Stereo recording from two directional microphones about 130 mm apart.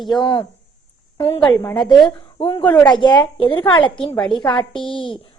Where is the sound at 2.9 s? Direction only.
35° left (ahead or behind).